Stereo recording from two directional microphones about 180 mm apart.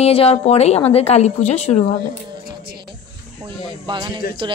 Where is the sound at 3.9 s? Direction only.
25° right (ahead or behind).